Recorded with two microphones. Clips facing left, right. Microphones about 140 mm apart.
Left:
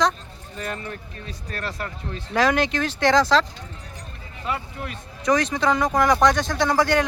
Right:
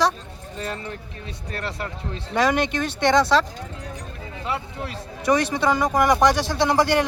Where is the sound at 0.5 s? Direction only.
25° right (ahead or behind).